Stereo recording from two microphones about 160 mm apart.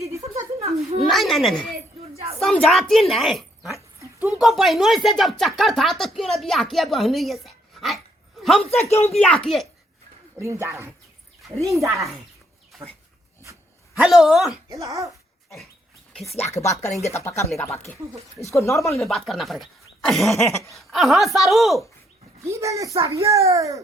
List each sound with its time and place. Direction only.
0.2 s a sound: 40° right (ahead or behind)
1.1 s a sound: centre (ahead or behind)
2.4 s a woman's voice: centre (ahead or behind)
8.7 s speech: 15° left (ahead or behind)
10.3 s a child's voice: 15° right (ahead or behind)
14.0 s speech: 5° right (ahead or behind)
14.7 s a child's voice: 20° right (ahead or behind)
16.4 s speech: 20° left (ahead or behind)
18.5 s speech: 20° left (ahead or behind)
18.9 s speech: centre (ahead or behind)
22.4 s a child's voice: 20° right (ahead or behind)